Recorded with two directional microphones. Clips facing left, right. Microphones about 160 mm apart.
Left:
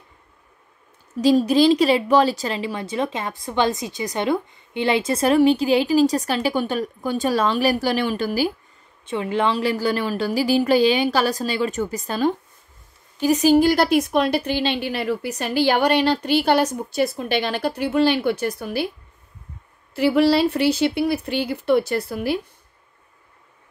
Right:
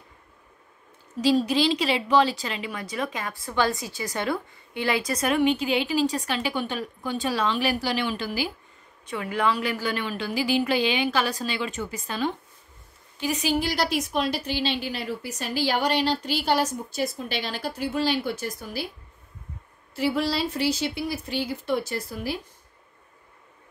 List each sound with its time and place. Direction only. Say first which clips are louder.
1.2 s a woman's voice: left 6 dB; 45° left (ahead or behind)
9.0 s a woman's voice: left 4 dB; 25° left (ahead or behind); by 18.9 s 65° left (ahead or behind)
19.9 s a woman's voice: left 8 dB; 65° left (ahead or behind)